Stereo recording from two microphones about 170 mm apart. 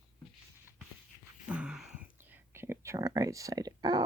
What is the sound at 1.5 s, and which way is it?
Whispering, 5° right (ahead or behind).